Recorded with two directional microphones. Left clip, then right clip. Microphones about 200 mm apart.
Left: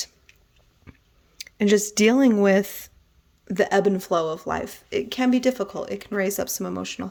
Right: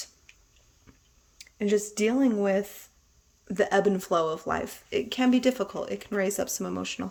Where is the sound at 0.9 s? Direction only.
35° left (ahead or behind).